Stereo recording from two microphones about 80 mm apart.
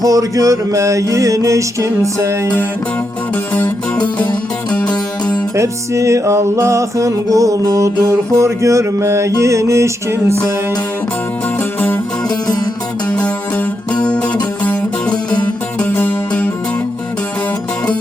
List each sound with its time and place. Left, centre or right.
0.0 s music: right
5.5 s music: right
12.3 s music: left
13.1 s music: centre